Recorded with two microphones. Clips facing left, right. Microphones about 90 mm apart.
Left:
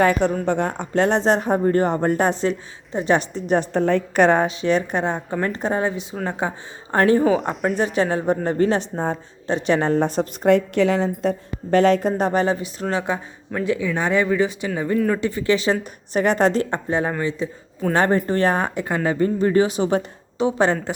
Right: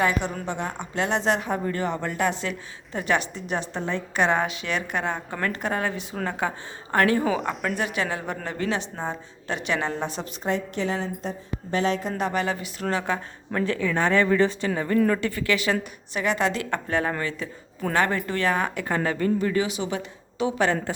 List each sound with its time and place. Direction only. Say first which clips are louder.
0.0 s a woman's voice: left 7 dB; 45° left (ahead or behind)
10.5 s a woman's voice: left 9 dB; 75° left (ahead or behind); by 13.1 s 20° left (ahead or behind)
13.5 s speech: left 3 dB; 10° left (ahead or behind)
15.2 s a woman's voice: left 5 dB; 20° left (ahead or behind)
16.1 s a woman's voice: left 7 dB; 40° left (ahead or behind)
16.6 s a woman's voice: left 3 dB; 25° left (ahead or behind)
17.9 s a woman's voice: left 5 dB; 35° left (ahead or behind)
20.4 s a woman's voice: left 4 dB; 25° left (ahead or behind)